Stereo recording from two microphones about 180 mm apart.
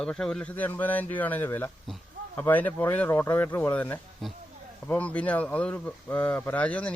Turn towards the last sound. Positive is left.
turn(degrees=5)  # may be behind; listen again after turning